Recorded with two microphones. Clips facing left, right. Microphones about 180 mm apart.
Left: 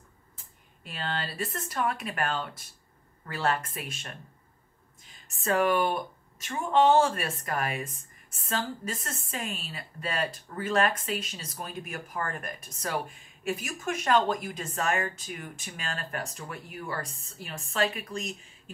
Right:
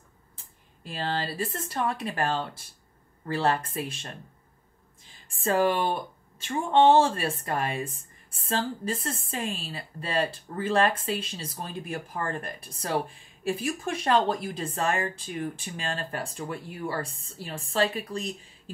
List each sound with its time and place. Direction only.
0.8 s speech: 30° right (ahead or behind)